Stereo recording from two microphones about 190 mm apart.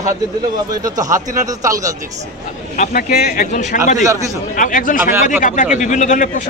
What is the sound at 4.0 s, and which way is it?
Speech, 15° right (ahead or behind).